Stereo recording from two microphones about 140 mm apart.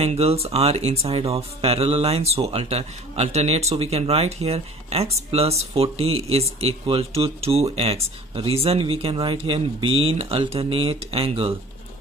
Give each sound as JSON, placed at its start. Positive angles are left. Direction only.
{"t": 0.0, "sound": "speech", "side_deg": -50}